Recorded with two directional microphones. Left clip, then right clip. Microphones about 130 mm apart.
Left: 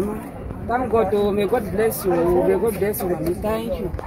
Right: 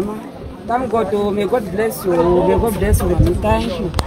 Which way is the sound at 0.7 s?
20° right (ahead or behind).